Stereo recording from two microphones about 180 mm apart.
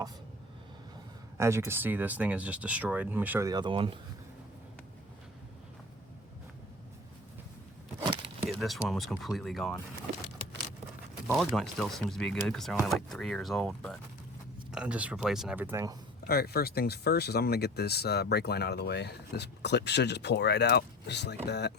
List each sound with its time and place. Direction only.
1.4 s speech: 15° right (ahead or behind)
8.4 s speech: centre (ahead or behind)
11.3 s speech: centre (ahead or behind); by 16.0 s 15° right (ahead or behind)
16.2 s speech: 60° left (ahead or behind)